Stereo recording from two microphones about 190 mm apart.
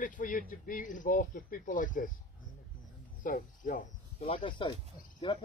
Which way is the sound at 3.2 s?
45° left (ahead or behind).